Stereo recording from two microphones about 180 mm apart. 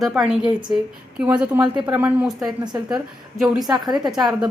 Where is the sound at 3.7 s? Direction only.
20° right (ahead or behind).